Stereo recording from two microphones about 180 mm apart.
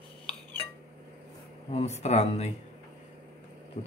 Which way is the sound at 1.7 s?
40° left (ahead or behind).